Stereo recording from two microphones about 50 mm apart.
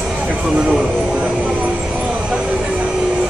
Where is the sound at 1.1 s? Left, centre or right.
Right.